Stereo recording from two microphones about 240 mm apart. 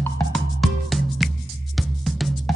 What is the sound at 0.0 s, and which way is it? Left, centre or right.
Music, centre.